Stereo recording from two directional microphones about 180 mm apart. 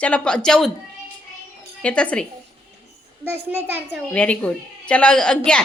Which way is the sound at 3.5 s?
10° right (ahead or behind).